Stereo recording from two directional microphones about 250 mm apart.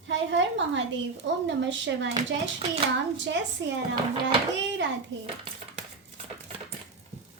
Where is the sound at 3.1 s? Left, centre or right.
Right.